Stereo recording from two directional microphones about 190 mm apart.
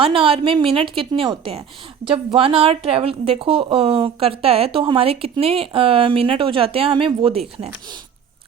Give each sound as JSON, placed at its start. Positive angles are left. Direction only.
{"t": 0.0, "sound": "a woman's voice", "side_deg": -30}